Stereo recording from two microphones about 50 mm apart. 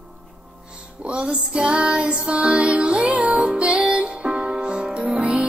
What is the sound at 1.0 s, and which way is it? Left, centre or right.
Child singing, right.